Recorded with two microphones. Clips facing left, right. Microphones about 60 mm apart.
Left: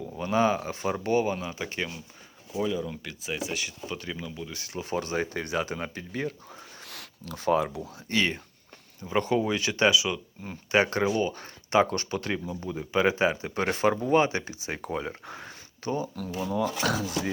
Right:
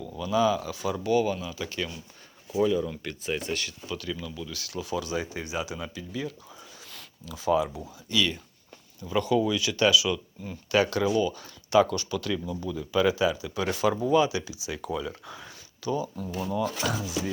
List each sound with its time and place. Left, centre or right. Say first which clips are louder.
0.2 s speech: even; left
2.6 s speech: right 4 dB; centre
3.8 s speech: right 1 dB; left
6.8 s a sound: left 3 dB; left
8.1 s speech: even; left
16.8 s speech: left 2 dB; left